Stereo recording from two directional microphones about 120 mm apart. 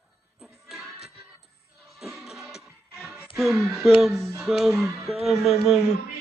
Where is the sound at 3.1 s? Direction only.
15° right (ahead or behind).